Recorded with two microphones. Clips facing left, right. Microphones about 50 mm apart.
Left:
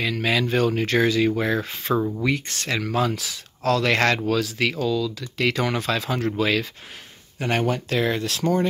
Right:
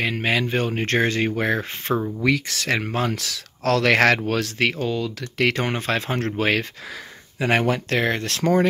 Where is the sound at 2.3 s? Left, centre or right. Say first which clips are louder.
Right 3 dB; right.